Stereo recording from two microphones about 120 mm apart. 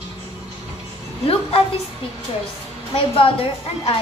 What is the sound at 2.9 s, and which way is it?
A woman's voice, 50° left (ahead or behind).